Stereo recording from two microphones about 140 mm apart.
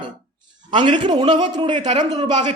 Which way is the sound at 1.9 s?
50° right (ahead or behind).